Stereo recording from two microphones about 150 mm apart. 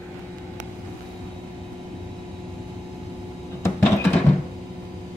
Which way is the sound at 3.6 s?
15° left (ahead or behind).